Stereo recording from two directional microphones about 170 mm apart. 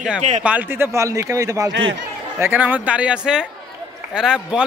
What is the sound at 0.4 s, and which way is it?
A man's voice, 10° right (ahead or behind).